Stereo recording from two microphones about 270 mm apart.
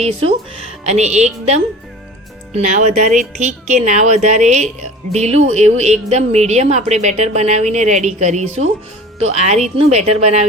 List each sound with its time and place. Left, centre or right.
0.0 s speech: right